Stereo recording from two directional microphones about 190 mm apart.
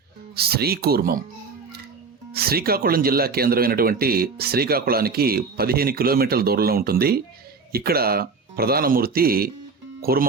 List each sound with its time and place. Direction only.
0.3 s speech: 55° right (ahead or behind)
2.3 s speech: 55° right (ahead or behind)